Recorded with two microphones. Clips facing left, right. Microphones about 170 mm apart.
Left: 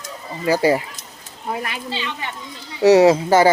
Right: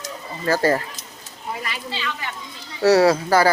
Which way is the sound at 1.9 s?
25° left (ahead or behind).